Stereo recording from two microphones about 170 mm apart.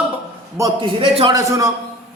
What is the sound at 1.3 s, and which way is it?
Speech, 20° right (ahead or behind).